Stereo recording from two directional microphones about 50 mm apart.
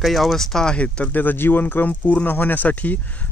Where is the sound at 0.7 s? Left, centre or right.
Left.